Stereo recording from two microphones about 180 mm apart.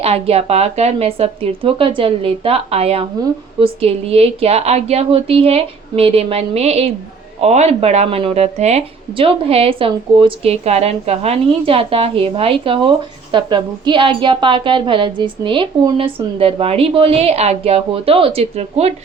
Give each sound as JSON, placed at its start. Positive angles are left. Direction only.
{"t": 0.0, "sound": "a woman's voice", "side_deg": -35}